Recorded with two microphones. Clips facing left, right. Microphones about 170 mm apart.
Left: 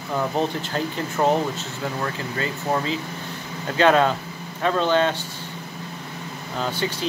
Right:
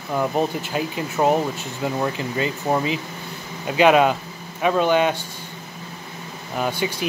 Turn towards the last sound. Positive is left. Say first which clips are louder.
# right 2 dB
turn(degrees=-15)  # may be behind; listen again after turning